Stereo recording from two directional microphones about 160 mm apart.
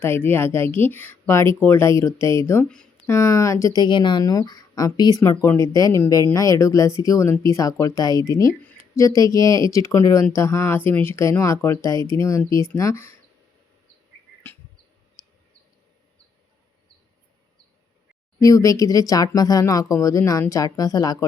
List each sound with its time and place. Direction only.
0.0 s speech: 15° left (ahead or behind)
18.3 s speech: 20° left (ahead or behind)